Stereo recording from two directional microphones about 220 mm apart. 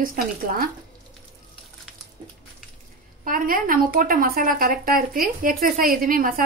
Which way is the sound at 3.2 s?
40° right (ahead or behind).